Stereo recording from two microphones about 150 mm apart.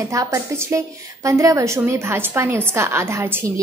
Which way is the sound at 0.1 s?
20° right (ahead or behind).